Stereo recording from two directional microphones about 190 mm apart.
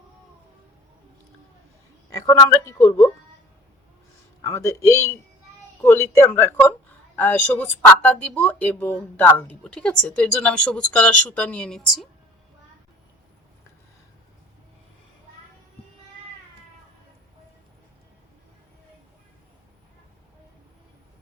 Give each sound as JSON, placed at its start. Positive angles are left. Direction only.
{"t": 2.0, "sound": "speech", "side_deg": 20}
{"t": 4.4, "sound": "speech", "side_deg": 15}